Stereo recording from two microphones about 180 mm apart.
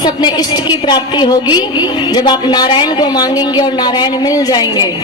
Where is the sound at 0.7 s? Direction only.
25° left (ahead or behind).